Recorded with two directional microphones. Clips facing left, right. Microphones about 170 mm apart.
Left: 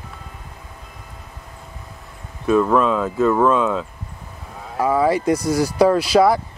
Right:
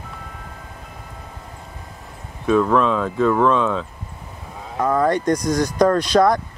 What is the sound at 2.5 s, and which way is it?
Speech, 5° left (ahead or behind).